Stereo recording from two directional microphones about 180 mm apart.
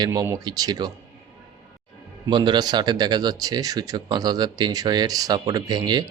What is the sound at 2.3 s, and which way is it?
Speech, 25° right (ahead or behind).